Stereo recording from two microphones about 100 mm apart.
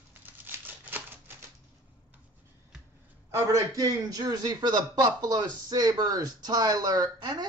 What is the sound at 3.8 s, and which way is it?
Speech, 40° right (ahead or behind).